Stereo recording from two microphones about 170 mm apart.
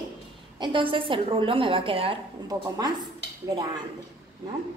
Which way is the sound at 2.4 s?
20° right (ahead or behind).